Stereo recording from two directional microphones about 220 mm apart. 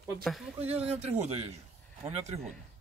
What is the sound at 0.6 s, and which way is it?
Speech, 30° right (ahead or behind).